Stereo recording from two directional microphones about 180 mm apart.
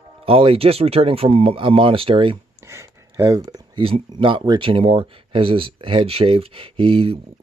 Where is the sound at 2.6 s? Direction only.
15° right (ahead or behind).